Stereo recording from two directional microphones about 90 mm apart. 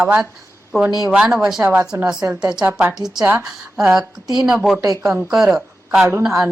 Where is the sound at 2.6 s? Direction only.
20° right (ahead or behind).